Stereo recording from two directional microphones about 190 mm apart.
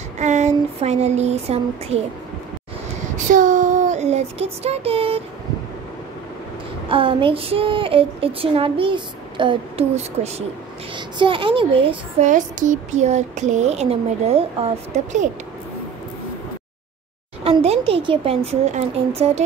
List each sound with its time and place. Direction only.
0.2 s a sound: 40° right (ahead or behind)
3.3 s child singing: 40° right (ahead or behind)
6.9 s speech: 25° right (ahead or behind)
12.3 s speech: 40° right (ahead or behind)
17.4 s speech: 30° right (ahead or behind)